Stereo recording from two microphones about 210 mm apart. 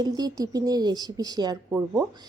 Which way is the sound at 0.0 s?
20° right (ahead or behind).